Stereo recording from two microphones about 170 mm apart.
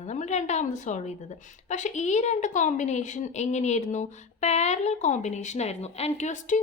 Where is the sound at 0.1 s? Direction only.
45° left (ahead or behind).